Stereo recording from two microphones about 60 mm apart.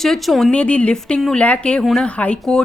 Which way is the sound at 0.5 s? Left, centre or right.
Left.